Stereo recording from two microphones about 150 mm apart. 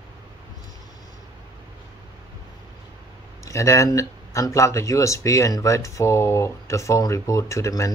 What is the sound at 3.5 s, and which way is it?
Speech, 20° left (ahead or behind).